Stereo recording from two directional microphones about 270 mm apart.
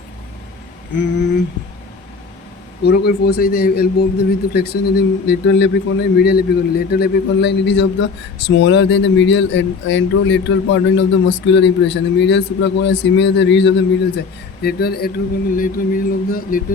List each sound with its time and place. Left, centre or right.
0.9 s a man's voice: left
2.8 s a man's voice: left